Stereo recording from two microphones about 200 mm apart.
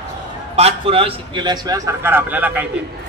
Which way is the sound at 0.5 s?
30° right (ahead or behind).